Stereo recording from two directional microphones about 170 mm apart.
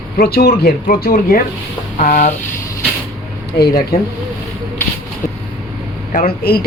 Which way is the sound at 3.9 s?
65° left (ahead or behind).